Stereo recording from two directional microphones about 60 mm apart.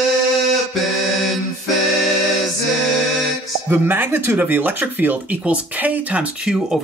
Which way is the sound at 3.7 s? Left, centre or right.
Right.